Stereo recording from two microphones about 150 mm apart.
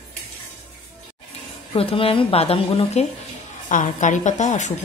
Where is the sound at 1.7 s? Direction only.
40° left (ahead or behind).